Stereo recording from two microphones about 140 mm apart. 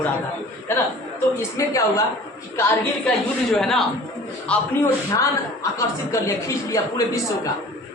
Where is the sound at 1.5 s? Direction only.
20° left (ahead or behind).